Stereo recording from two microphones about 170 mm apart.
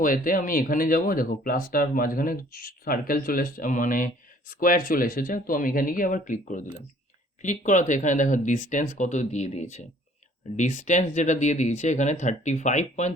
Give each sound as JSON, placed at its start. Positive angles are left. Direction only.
{"t": 0.0, "sound": "speech", "side_deg": 55}